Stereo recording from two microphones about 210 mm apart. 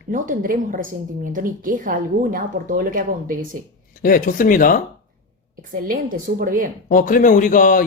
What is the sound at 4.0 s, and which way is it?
Speech, 40° left (ahead or behind).